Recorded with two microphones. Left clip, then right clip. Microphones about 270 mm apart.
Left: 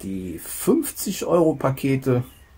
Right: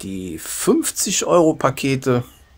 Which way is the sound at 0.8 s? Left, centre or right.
Right.